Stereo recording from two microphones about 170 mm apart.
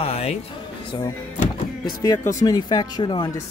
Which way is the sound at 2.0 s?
20° left (ahead or behind).